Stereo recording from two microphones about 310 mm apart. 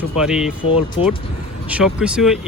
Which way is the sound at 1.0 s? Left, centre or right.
Centre.